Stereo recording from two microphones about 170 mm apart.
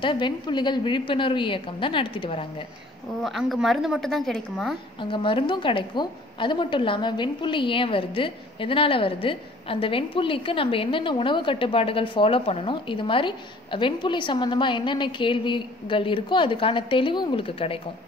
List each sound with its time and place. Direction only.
0.0 s a woman's voice: 25° left (ahead or behind)
3.2 s a woman's voice: centre (ahead or behind)
5.1 s a woman's voice: 30° left (ahead or behind)